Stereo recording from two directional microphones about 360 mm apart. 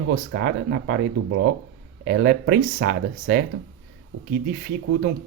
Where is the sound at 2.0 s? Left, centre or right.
Right.